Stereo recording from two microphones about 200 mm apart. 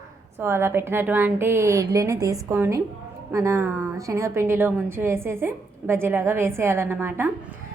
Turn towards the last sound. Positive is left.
turn(degrees=-10)  # may be behind; listen again after turning